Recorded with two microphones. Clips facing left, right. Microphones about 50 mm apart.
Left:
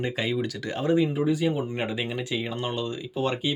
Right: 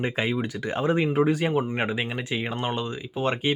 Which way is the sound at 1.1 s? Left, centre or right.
Right.